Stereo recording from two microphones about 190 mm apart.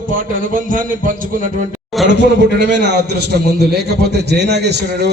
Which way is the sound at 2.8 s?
60° right (ahead or behind).